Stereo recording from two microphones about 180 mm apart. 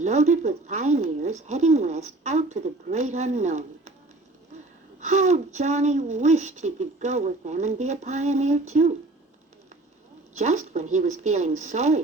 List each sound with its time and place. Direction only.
0.0 s speech: 40° right (ahead or behind)
4.9 s speech: 40° right (ahead or behind)
10.3 s speech: 40° right (ahead or behind)